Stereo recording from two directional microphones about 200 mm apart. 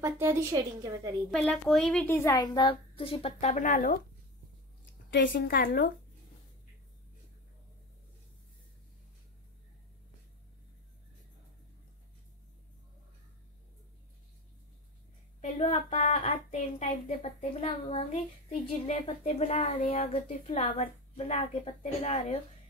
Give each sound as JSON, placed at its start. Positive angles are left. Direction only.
{"t": 0.0, "sound": "a woman's voice", "side_deg": -15}
{"t": 1.3, "sound": "a woman's voice", "side_deg": 5}
{"t": 5.3, "sound": "a woman's voice", "side_deg": 50}
{"t": 15.6, "sound": "a child's voice", "side_deg": 40}